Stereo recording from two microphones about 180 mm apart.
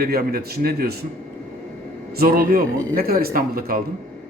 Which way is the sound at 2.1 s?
55° right (ahead or behind).